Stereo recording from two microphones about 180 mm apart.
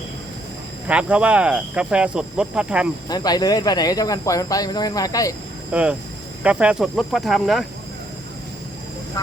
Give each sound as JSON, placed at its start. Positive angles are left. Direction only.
{"t": 0.9, "sound": "speech", "side_deg": -5}
{"t": 3.1, "sound": "speech", "side_deg": 20}
{"t": 5.7, "sound": "speech", "side_deg": -5}
{"t": 9.2, "sound": "speech", "side_deg": 20}